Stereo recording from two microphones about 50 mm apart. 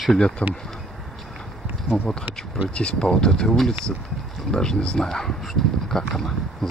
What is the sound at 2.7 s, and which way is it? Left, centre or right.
Speech, left.